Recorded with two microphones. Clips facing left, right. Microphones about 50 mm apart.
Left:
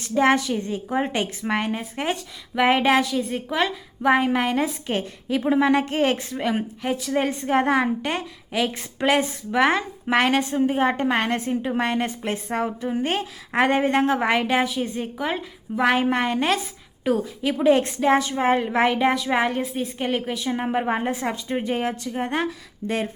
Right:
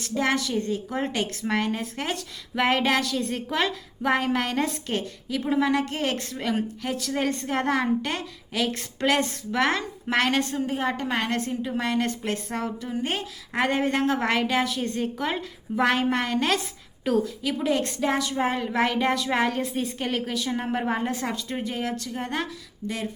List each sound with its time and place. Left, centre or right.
0.0 s a woman's voice: left
4.9 s a woman's voice: left
12.0 s a woman's voice: centre
14.7 s a woman's voice: centre
16.0 s a woman's voice: left
16.5 s a woman's voice: centre
17.2 s a woman's voice: left
19.6 s a woman's voice: centre
20.0 s a woman's voice: centre; by 23.0 s left